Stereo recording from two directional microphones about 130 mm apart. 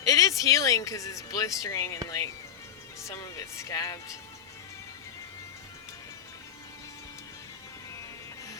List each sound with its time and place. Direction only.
0.0 s speech: 25° left (ahead or behind)